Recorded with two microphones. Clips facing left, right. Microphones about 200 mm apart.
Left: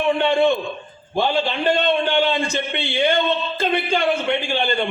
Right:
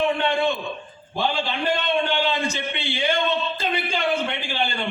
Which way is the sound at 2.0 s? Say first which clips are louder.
Left 5 dB; 55° left (ahead or behind).